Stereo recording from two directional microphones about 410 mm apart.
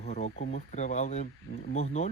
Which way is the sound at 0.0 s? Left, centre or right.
Centre.